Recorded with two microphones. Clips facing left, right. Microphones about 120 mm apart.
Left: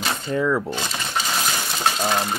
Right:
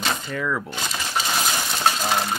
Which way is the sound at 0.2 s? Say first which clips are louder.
Left 5 dB; 25° left (ahead or behind).